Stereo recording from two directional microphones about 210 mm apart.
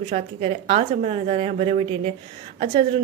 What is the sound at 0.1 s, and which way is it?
A woman's voice, 30° right (ahead or behind).